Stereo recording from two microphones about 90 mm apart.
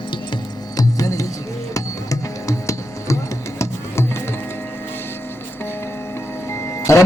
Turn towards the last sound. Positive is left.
turn(degrees=35)  # may be behind; listen again after turning